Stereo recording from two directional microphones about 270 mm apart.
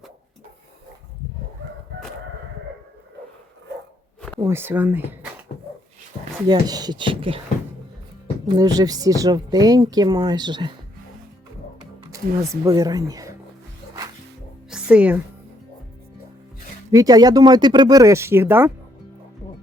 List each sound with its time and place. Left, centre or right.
4.4 s speech: centre
6.5 s speech: centre
8.4 s speech: centre
12.3 s speech: right
12.6 s speech: centre
14.7 s music: centre
16.9 s speech: centre